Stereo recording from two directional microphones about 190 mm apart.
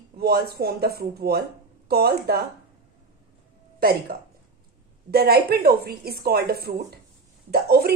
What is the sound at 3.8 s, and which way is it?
Speech, 55° right (ahead or behind).